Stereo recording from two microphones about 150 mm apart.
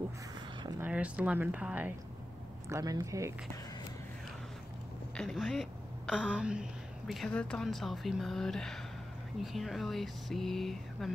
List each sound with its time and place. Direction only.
0.7 s speech: 10° right (ahead or behind)
2.7 s speech: 20° right (ahead or behind)
5.1 s a woman's voice: centre (ahead or behind)